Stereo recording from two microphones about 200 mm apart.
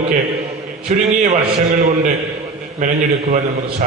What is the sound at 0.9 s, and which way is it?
Speech, 35° right (ahead or behind).